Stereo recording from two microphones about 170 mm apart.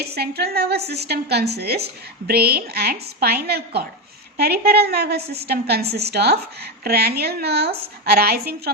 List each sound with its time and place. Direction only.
0.0 s a woman's voice: 70° right (ahead or behind)